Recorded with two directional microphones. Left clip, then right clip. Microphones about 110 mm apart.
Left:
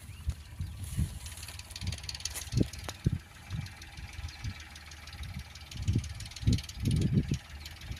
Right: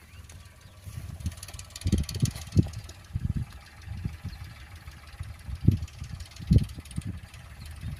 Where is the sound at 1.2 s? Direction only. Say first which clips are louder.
Right 1 dB; 40° right (ahead or behind).